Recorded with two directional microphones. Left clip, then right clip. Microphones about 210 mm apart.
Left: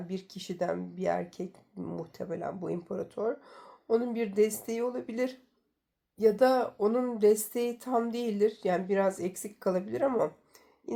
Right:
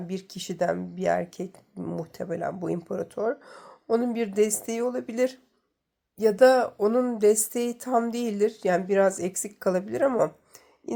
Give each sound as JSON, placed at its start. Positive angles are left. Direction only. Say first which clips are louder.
{"t": 0.1, "sound": "speech", "louder": "right 4 dB", "side_deg": -40}